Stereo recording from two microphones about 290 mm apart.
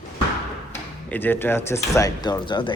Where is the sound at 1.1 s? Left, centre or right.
Centre.